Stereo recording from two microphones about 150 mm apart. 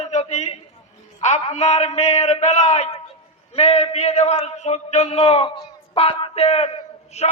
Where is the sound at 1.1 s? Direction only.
45° left (ahead or behind).